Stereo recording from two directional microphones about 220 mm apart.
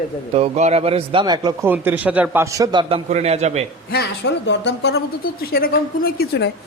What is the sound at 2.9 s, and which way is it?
Speech, 30° right (ahead or behind).